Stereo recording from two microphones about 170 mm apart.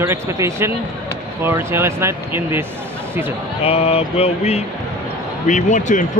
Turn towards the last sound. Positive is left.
turn(degrees=45)  # may be behind; listen again after turning